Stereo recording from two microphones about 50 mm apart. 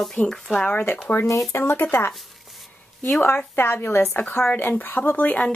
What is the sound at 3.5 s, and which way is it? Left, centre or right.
A woman's voice, left.